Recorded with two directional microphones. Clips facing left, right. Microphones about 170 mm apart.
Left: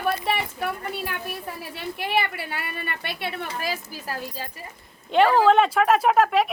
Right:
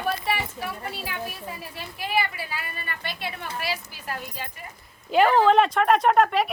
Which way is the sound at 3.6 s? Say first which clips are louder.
Left 2 dB; 35° left (ahead or behind).